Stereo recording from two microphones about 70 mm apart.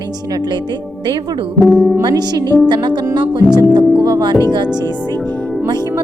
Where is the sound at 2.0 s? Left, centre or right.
Right.